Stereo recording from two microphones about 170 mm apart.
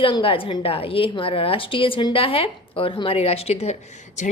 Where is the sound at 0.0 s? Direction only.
30° left (ahead or behind).